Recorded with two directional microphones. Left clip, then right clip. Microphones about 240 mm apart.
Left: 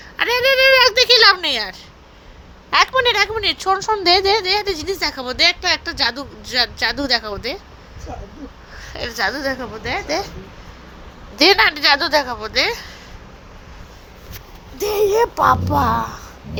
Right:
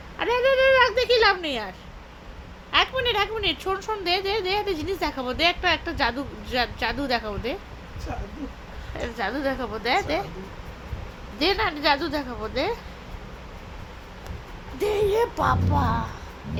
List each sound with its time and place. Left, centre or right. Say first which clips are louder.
0.2 s a sound: left 6 dB; left
2.6 s speech: left 7 dB; left
9.0 s speech: left 7 dB; left
9.8 s a woman's voice: even; centre
11.3 s speech: left 11 dB; left
14.8 s speech: left 6 dB; left
15.7 s speech: left 8 dB; left